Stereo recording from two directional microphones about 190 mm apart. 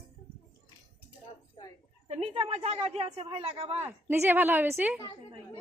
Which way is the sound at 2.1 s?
30° right (ahead or behind).